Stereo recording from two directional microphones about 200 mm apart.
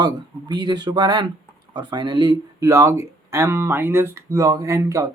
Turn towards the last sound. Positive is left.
turn(degrees=-15)  # may be behind; listen again after turning